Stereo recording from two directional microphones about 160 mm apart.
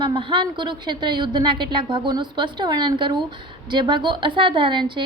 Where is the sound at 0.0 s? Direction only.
30° right (ahead or behind).